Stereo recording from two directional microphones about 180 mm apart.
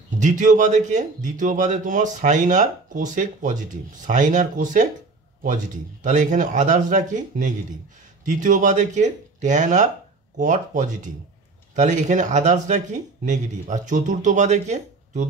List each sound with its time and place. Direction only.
0.2 s speech: 45° right (ahead or behind)
6.0 s speech: 45° right (ahead or behind)